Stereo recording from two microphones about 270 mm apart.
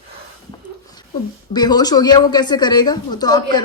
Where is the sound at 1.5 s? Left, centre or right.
Centre.